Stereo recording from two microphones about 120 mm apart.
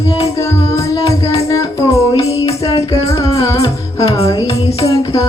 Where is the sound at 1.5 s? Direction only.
25° left (ahead or behind).